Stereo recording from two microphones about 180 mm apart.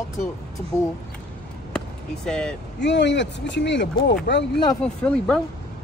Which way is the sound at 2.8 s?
75° left (ahead or behind).